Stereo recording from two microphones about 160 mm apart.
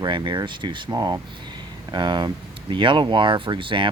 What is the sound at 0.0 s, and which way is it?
Speech, 30° right (ahead or behind).